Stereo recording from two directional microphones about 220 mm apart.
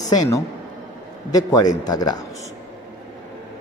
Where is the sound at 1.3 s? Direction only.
15° left (ahead or behind).